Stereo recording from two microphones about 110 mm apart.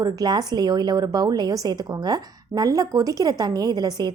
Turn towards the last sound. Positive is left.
turn(degrees=-40)  # may be behind; listen again after turning